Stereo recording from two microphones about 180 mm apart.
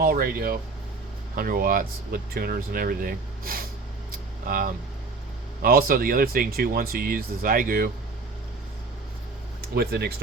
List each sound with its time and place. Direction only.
0.0 s speech: 55° right (ahead or behind)
9.6 s speech: 60° right (ahead or behind)